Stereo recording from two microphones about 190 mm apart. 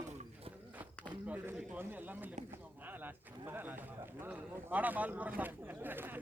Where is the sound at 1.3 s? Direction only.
5° right (ahead or behind).